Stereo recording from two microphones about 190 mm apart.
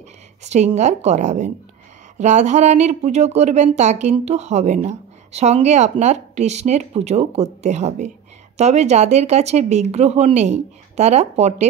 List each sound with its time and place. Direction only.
0.4 s a woman's voice: 35° right (ahead or behind)